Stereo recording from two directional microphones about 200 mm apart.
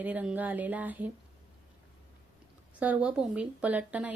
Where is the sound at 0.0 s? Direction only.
10° right (ahead or behind).